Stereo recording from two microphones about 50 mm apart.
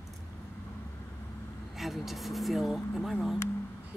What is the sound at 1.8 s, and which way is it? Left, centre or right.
Speech, centre.